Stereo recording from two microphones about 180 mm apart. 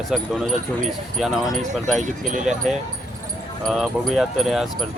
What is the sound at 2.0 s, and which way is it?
Speech, 45° right (ahead or behind).